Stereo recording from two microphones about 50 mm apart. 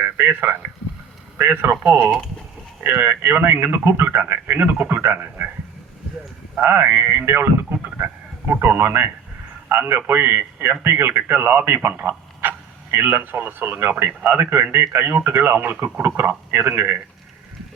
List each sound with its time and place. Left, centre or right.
0.0 s speech: right
2.8 s speech: right
6.6 s speech: right
7.8 s a sound: right
9.7 s a man's voice: right